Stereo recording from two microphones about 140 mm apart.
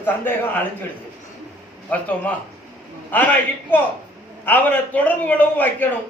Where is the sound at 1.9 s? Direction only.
10° left (ahead or behind).